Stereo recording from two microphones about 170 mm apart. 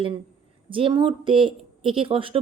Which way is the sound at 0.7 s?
30° right (ahead or behind).